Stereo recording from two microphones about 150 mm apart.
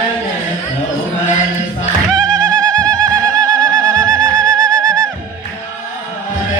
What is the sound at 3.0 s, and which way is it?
Bird, 25° right (ahead or behind).